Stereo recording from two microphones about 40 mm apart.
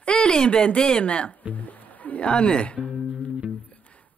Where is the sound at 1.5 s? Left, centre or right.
Left.